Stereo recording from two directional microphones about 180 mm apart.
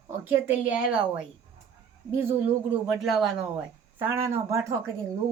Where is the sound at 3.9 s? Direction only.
10° right (ahead or behind).